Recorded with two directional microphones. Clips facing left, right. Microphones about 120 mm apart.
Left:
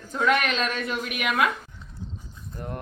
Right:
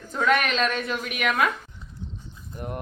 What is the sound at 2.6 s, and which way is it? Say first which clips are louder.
Speech: right 1 dB; 15° right (ahead or behind).